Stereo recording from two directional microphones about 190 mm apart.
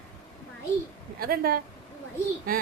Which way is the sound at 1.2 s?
50° right (ahead or behind).